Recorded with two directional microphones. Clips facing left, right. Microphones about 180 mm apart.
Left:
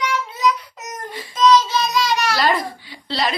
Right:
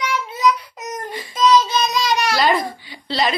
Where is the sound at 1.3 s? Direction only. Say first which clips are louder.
Even; 15° right (ahead or behind).